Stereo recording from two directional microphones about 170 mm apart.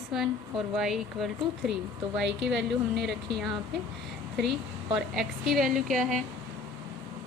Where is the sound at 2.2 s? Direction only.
90° right.